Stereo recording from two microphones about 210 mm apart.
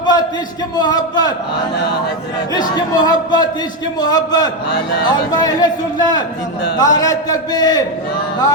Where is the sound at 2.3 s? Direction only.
20° left (ahead or behind).